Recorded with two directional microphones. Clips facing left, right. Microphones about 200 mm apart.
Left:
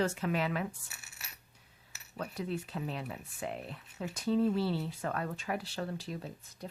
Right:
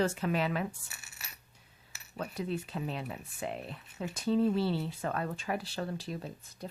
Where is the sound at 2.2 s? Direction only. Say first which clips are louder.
Right 1 dB; 25° right (ahead or behind).